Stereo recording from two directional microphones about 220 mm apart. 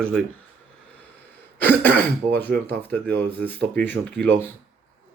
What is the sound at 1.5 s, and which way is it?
Speech, 10° left (ahead or behind).